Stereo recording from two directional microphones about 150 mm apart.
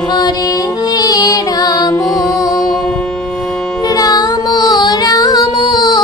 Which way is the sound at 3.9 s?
25° left (ahead or behind).